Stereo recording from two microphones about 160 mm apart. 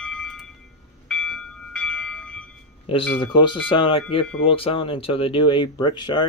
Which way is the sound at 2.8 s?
30° left (ahead or behind).